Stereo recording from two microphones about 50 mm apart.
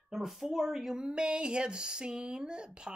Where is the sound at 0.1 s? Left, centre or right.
Centre.